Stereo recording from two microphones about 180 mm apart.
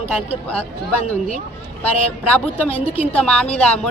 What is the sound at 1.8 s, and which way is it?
Speech, 10° left (ahead or behind).